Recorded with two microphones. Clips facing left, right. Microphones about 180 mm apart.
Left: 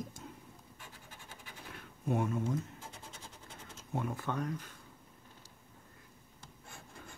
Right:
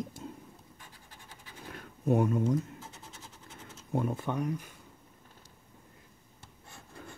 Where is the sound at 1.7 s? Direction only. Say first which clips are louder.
Right 7 dB; 40° right (ahead or behind).